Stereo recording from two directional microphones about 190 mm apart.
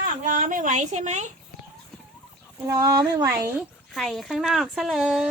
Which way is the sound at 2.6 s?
20° right (ahead or behind).